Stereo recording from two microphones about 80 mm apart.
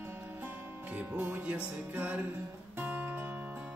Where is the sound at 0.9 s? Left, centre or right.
Centre.